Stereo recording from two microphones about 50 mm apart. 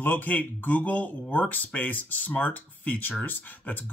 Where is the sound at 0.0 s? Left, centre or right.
Left.